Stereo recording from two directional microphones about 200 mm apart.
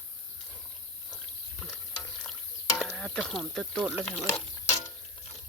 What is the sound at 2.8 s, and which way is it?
Speech, 5° left (ahead or behind).